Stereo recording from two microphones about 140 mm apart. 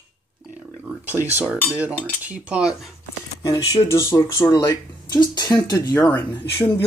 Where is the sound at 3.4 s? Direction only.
25° left (ahead or behind).